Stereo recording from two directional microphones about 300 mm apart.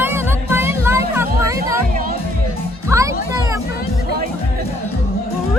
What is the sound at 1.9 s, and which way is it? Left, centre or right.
Music, right.